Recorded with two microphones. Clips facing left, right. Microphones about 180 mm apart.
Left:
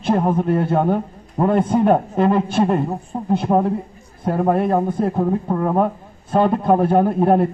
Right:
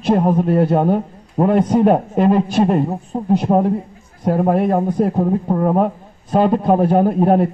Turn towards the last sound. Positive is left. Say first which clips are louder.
# right 1 dB
turn(degrees=-15)  # may be behind; listen again after turning